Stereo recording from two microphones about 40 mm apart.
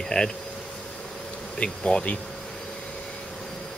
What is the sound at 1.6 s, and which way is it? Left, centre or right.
Bee, left.